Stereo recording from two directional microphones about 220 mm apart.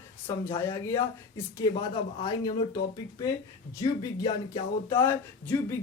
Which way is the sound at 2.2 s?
20° left (ahead or behind).